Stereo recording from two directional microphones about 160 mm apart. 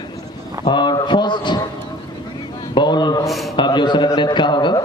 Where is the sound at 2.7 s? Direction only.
30° left (ahead or behind).